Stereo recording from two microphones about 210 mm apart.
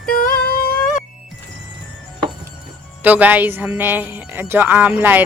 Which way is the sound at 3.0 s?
5° right (ahead or behind).